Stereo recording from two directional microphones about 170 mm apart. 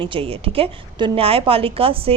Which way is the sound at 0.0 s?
30° right (ahead or behind).